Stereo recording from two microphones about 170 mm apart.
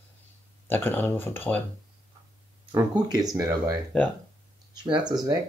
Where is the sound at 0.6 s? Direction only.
10° left (ahead or behind).